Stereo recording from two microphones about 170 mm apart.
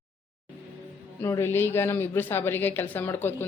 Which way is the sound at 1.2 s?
15° left (ahead or behind).